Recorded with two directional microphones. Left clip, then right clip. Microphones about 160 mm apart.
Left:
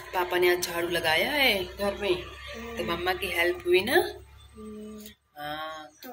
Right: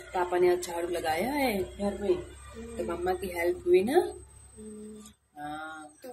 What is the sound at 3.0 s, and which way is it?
Speech, 20° right (ahead or behind).